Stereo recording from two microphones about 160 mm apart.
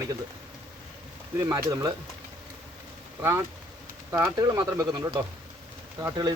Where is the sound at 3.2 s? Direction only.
15° right (ahead or behind).